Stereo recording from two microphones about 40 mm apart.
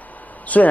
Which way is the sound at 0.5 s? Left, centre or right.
Left.